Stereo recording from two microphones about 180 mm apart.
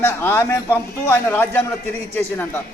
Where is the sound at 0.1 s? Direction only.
10° left (ahead or behind).